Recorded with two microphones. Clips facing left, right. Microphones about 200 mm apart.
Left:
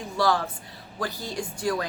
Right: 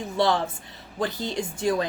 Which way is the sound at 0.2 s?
25° right (ahead or behind).